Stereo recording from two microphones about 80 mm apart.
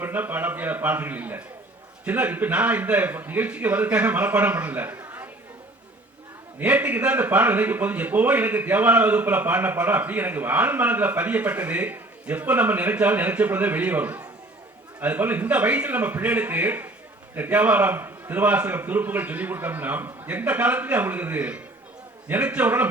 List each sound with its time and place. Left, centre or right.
0.0 s a man's voice: right
6.6 s a man's voice: centre